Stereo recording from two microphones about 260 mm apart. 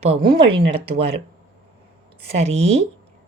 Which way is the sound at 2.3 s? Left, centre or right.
Right.